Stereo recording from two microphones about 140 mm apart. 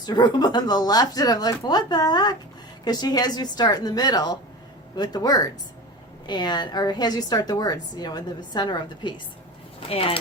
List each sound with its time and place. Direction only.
0.0 s a woman's voice: 30° left (ahead or behind)